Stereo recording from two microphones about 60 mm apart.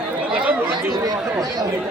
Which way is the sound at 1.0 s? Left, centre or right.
Right.